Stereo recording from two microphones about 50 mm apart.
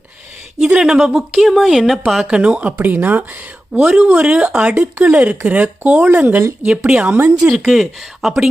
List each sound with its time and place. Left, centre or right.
0.8 s speech: centre
2.2 s speech: right
2.7 s speech: right
3.8 s speech: right
6.0 s speech: right
6.7 s speech: centre
7.5 s speech: centre